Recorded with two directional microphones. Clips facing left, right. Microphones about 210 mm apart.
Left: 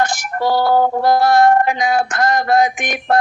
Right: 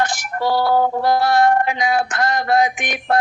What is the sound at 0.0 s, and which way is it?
Music, 45° left (ahead or behind).